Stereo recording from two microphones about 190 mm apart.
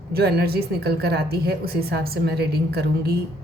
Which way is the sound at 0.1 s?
55° right (ahead or behind).